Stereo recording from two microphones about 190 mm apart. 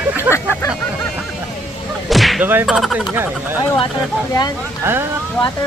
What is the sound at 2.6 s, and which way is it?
Speech, centre (ahead or behind).